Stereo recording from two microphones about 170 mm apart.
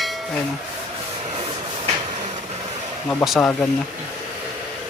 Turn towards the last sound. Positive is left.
turn(degrees=10)  # may be behind; listen again after turning